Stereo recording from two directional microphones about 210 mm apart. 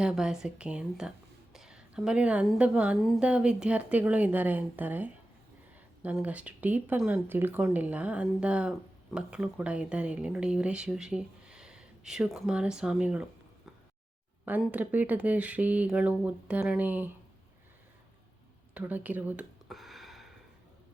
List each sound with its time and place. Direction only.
0.0 s speech: 5° right (ahead or behind)
14.4 s speech: 5° right (ahead or behind)
18.7 s a sound: 10° right (ahead or behind)